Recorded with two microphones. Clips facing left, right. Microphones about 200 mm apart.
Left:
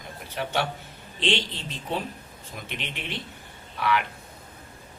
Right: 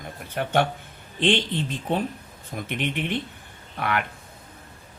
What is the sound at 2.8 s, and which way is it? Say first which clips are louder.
Speech: right 11 dB; 55° right (ahead or behind).